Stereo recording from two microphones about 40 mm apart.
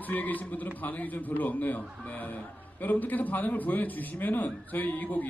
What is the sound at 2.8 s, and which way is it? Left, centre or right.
Speech, left.